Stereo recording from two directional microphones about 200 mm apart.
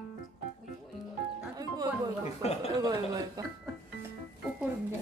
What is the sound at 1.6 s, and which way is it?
Music, 20° right (ahead or behind).